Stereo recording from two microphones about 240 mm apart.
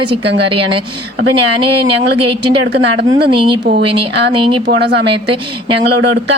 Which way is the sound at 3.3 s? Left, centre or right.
Right.